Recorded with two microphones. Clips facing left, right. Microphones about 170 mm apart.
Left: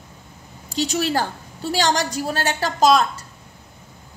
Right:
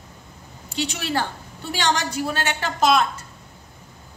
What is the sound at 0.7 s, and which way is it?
A woman's voice, 40° left (ahead or behind).